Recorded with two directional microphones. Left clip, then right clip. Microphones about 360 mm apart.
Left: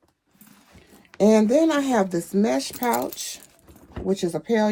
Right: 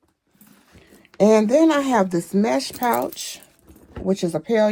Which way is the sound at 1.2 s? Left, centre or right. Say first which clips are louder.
Right 3 dB; right.